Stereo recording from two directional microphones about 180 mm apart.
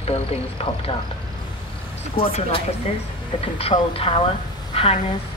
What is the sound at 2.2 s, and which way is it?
Speech, 30° left (ahead or behind).